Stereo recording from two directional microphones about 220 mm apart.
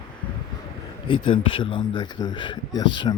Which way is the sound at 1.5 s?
20° left (ahead or behind).